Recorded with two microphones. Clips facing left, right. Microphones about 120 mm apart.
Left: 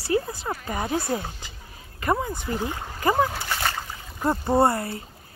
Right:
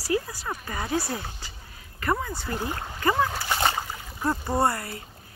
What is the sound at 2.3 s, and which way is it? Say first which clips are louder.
Speech: left 2 dB; 15° left (ahead or behind).